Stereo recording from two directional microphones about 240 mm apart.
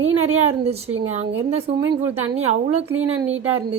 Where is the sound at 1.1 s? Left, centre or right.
Right.